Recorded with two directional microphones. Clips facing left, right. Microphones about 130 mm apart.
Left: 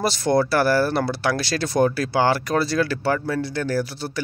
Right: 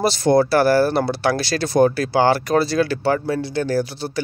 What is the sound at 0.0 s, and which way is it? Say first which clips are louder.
Speech: right 4 dB; 25° right (ahead or behind).